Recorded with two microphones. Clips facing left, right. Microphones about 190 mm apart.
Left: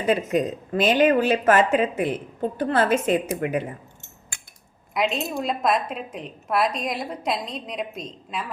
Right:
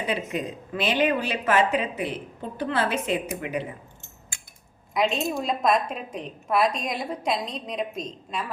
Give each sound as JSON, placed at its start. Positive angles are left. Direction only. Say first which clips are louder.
{"t": 0.1, "sound": "a woman's voice", "louder": "left 10 dB", "side_deg": 45}
{"t": 4.9, "sound": "a woman's voice", "louder": "even", "side_deg": 0}